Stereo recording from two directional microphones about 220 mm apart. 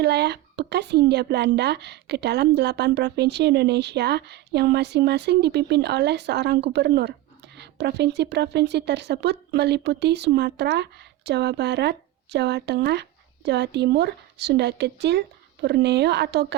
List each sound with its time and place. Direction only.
0.0 s a woman's voice: 50° right (ahead or behind)